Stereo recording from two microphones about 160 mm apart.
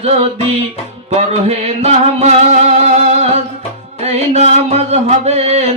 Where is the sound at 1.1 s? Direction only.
40° right (ahead or behind).